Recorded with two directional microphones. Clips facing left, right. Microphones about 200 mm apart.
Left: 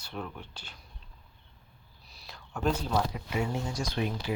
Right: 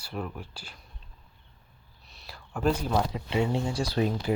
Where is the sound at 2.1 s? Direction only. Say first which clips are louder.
Right 2 dB; centre (ahead or behind).